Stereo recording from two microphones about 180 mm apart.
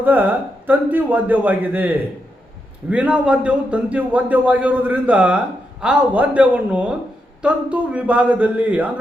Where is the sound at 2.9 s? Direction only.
5° right (ahead or behind).